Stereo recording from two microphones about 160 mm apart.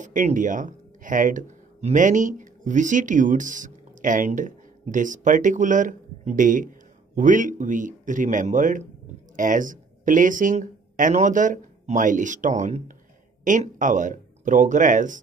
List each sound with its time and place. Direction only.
0.0 s speech: 50° right (ahead or behind)